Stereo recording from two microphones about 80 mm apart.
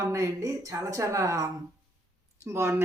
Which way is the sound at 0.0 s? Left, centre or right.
Right.